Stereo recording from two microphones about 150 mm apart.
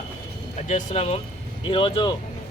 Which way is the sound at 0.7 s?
50° left (ahead or behind).